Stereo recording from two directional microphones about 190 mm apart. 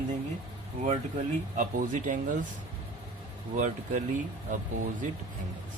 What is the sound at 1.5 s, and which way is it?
Speech, 45° right (ahead or behind).